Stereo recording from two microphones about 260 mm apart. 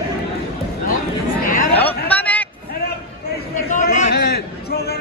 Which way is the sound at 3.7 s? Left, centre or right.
Left.